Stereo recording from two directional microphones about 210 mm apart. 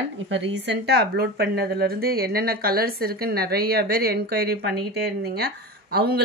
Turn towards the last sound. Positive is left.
turn(degrees=-50)  # may be behind; listen again after turning